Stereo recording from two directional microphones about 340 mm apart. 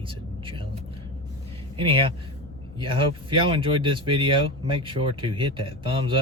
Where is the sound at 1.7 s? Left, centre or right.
Centre.